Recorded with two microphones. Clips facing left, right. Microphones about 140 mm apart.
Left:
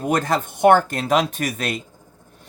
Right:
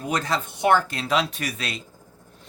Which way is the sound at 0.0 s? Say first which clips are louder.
Left 5 dB; 50° left (ahead or behind).